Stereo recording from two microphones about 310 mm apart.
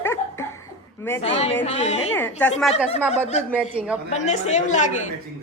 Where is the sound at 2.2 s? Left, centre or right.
Centre.